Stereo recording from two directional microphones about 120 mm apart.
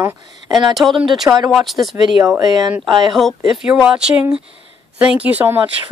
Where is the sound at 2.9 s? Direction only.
40° right (ahead or behind).